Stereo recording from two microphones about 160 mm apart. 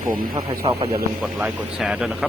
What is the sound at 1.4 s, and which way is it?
Speech, 5° right (ahead or behind).